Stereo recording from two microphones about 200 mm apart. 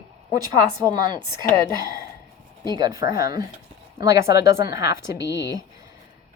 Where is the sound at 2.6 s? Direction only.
20° right (ahead or behind).